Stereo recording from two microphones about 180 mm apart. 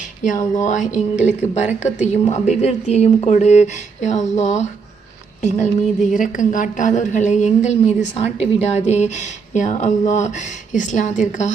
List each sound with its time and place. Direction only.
0.3 s a woman's voice: 45° left (ahead or behind)